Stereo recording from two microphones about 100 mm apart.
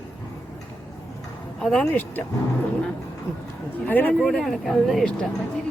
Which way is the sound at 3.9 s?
15° left (ahead or behind).